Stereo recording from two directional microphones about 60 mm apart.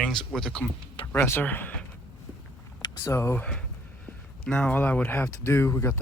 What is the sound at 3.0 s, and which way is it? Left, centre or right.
Speech, left.